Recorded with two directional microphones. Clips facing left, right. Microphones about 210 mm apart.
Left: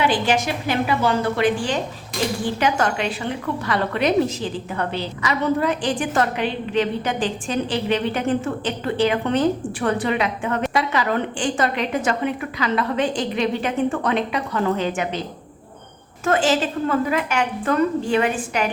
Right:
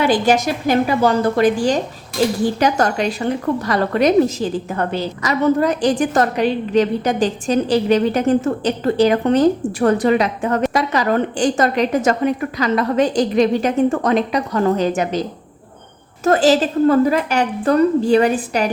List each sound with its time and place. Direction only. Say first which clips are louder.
0.0 s a woman's voice: right 5 dB; 40° right (ahead or behind)
16.2 s a woman's voice: right 5 dB; 40° right (ahead or behind)